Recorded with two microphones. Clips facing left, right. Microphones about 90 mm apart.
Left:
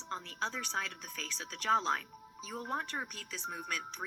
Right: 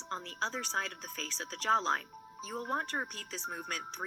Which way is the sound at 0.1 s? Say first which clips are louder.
Right 1 dB; 35° right (ahead or behind).